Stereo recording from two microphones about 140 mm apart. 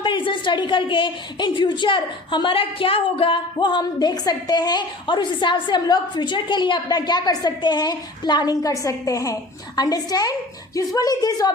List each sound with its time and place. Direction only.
0.0 s a woman's voice: 35° left (ahead or behind)